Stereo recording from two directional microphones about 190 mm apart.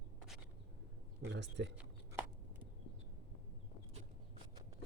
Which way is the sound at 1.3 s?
70° right (ahead or behind).